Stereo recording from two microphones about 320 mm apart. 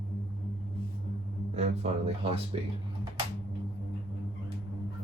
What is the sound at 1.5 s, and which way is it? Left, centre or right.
Speech, centre.